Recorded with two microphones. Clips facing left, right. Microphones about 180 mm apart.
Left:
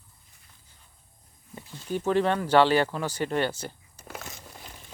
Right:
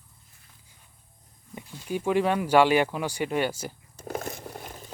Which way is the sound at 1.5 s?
10° right (ahead or behind).